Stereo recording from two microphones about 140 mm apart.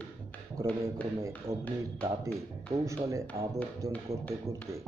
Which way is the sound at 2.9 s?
20° right (ahead or behind).